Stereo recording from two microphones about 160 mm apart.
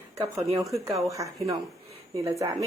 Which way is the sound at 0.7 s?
20° right (ahead or behind).